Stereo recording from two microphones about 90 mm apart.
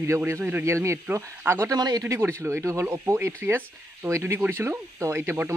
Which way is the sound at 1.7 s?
50° right (ahead or behind).